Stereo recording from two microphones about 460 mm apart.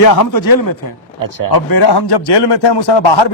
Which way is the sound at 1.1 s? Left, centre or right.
Right.